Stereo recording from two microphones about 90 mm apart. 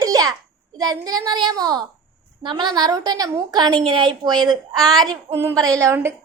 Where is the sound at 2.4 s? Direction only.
60° right (ahead or behind).